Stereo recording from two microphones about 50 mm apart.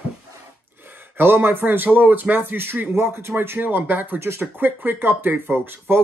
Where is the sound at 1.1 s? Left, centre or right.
Right.